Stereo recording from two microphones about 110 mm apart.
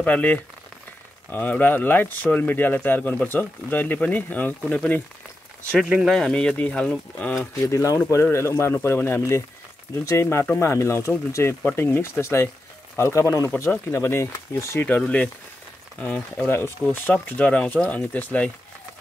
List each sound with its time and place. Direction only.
0.0 s speech: 10° left (ahead or behind)
5.9 s speech: 5° right (ahead or behind)
6.1 s speech: 5° left (ahead or behind)
7.6 s speech: 30° left (ahead or behind)
14.9 s speech: 10° left (ahead or behind)